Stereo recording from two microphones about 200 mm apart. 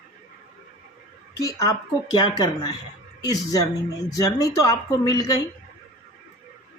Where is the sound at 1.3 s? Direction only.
15° left (ahead or behind).